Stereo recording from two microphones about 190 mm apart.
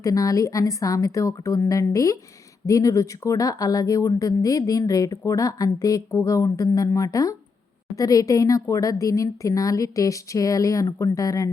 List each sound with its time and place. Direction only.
0.0 s speech: 20° left (ahead or behind)